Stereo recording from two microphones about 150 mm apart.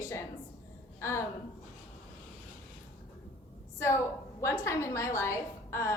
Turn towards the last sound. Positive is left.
turn(degrees=20)  # may be behind; listen again after turning